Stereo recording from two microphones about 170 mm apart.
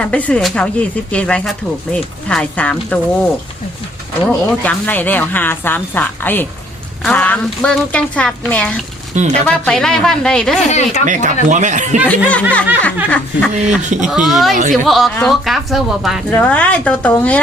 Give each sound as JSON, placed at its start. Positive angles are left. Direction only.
{"t": 0.0, "sound": "speech", "side_deg": 10}
{"t": 4.3, "sound": "speech", "side_deg": 10}
{"t": 9.1, "sound": "speech", "side_deg": -45}
{"t": 9.6, "sound": "a woman's voice", "side_deg": 5}
{"t": 10.7, "sound": "speech", "side_deg": 40}
{"t": 11.0, "sound": "speech", "side_deg": -50}
{"t": 12.0, "sound": "speech", "side_deg": 10}
{"t": 13.6, "sound": "speech", "side_deg": -45}
{"t": 14.1, "sound": "a woman's voice", "side_deg": 0}